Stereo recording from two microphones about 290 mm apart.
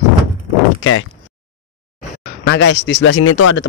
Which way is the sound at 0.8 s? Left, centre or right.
Left.